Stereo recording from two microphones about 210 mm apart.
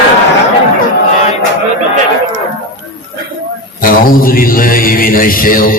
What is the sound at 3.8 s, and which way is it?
A man's voice, 45° left (ahead or behind).